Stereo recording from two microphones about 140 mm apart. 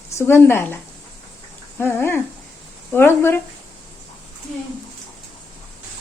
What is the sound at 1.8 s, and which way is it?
Speech, 15° left (ahead or behind).